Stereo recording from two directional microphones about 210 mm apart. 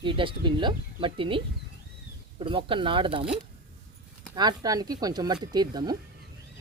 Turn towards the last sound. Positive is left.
turn(degrees=-20)  # may be behind; listen again after turning